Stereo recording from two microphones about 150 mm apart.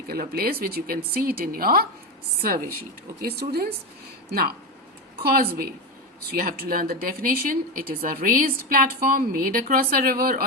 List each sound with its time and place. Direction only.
0.1 s speech: 90° right
3.2 s speech: 90° right